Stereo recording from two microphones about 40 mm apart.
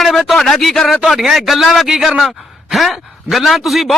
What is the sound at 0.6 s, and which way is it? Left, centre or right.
A man's voice, centre.